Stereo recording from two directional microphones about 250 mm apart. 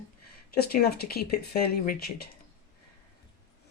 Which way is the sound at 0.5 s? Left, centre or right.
Left.